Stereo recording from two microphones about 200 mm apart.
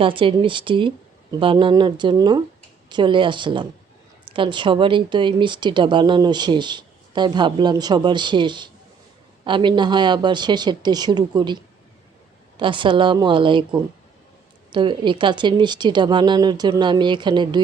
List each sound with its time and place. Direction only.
0.0 s speech: 25° right (ahead or behind)